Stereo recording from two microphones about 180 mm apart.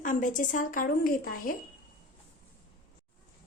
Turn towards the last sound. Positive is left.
turn(degrees=55)  # may be behind; listen again after turning